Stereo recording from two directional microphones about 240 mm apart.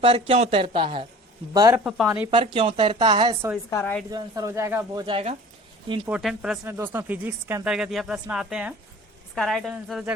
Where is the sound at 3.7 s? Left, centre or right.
Centre.